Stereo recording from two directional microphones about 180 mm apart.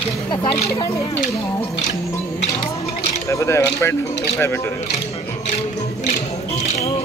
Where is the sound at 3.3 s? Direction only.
15° left (ahead or behind).